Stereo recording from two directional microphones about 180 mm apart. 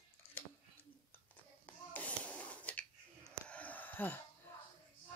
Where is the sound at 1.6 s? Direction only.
10° left (ahead or behind).